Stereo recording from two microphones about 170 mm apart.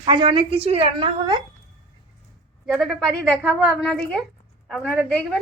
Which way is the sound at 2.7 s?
Centre (ahead or behind).